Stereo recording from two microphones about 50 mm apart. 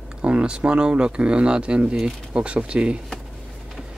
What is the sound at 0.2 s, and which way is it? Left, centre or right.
Speech, right.